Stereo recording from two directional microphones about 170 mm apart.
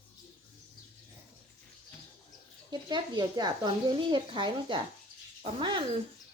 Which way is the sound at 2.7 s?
25° right (ahead or behind).